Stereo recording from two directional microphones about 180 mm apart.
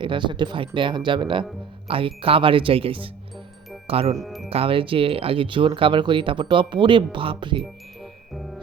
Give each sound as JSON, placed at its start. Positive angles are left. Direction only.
{"t": 0.0, "sound": "speech", "side_deg": -25}
{"t": 4.2, "sound": "music", "side_deg": 0}
{"t": 4.4, "sound": "speech", "side_deg": -30}